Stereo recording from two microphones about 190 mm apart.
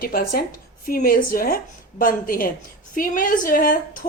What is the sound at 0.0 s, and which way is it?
A woman's voice, 50° left (ahead or behind).